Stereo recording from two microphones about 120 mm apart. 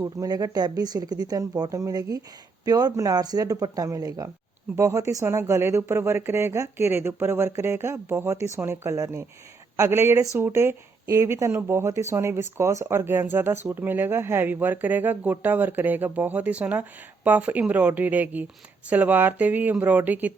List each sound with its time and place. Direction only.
0.0 s speech: 30° right (ahead or behind); by 20.3 s 15° right (ahead or behind)